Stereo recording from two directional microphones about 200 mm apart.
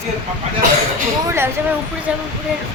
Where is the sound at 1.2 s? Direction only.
10° right (ahead or behind).